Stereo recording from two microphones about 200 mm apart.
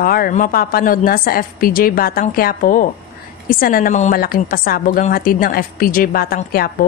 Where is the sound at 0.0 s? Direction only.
45° left (ahead or behind).